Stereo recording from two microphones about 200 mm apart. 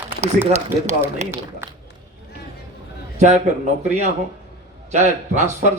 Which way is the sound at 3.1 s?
35° right (ahead or behind).